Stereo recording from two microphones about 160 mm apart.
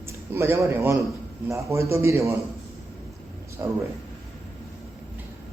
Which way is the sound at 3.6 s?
15° right (ahead or behind).